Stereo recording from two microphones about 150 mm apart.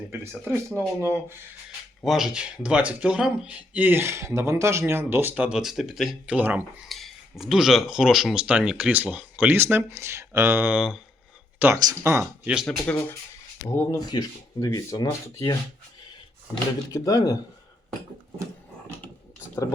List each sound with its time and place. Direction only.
0.1 s speech: 15° right (ahead or behind)
2.0 s speech: centre (ahead or behind)
11.8 s speech: 25° right (ahead or behind)
12.2 s speech: 5° right (ahead or behind)
13.7 s speech: 25° left (ahead or behind)
16.9 s speech: 20° left (ahead or behind)